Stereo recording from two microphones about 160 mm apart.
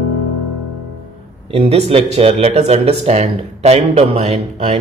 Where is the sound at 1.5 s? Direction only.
40° right (ahead or behind).